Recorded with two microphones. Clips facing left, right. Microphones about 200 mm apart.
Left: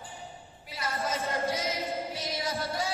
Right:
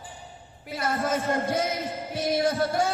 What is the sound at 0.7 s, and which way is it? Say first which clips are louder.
Speech: right 6 dB; 55° right (ahead or behind).